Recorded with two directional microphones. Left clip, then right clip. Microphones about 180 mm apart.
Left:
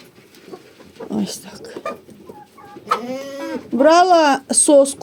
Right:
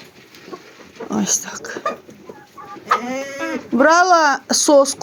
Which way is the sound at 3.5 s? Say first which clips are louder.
Left 1 dB; 10° left (ahead or behind).